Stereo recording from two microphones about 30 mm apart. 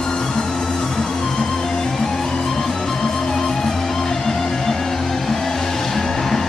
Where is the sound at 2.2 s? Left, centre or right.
Centre.